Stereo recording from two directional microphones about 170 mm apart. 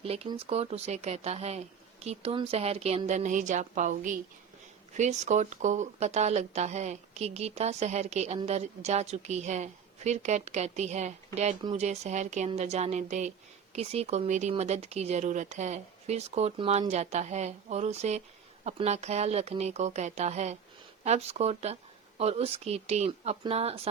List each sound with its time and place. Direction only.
0.0 s speech: 35° right (ahead or behind)